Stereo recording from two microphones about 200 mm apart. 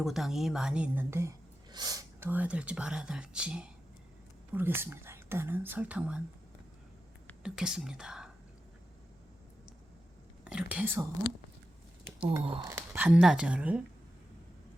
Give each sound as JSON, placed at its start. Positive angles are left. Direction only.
{"t": 0.0, "sound": "a woman's voice", "side_deg": 0}
{"t": 7.4, "sound": "a woman's voice", "side_deg": -5}
{"t": 10.4, "sound": "speech", "side_deg": -5}
{"t": 12.0, "sound": "a sound", "side_deg": -10}
{"t": 12.4, "sound": "speech", "side_deg": -25}
{"t": 12.6, "sound": "a woman's voice", "side_deg": -10}